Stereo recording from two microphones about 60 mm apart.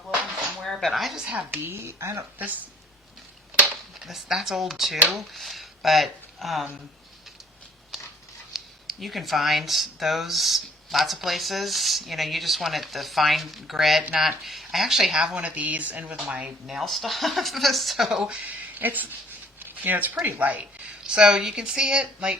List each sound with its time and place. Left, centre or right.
0.6 s a sound: centre
1.2 s speech: right
1.5 s speech: right
1.8 s speech: right
4.0 s speech: centre
7.9 s a sound: centre
8.5 s speech: centre; by 16.1 s right
16.1 s speech: centre
16.6 s speech: centre
18.3 s speech: right
19.5 s a sound: right
20.2 s speech: right
21.2 s speech: centre